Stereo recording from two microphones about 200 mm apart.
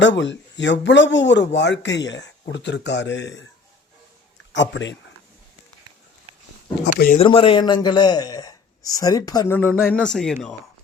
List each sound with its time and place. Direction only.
0.0 s speech: 65° left (ahead or behind)
4.5 s speech: 65° left (ahead or behind)
7.2 s a man's voice: 25° left (ahead or behind); by 10.3 s 5° left (ahead or behind)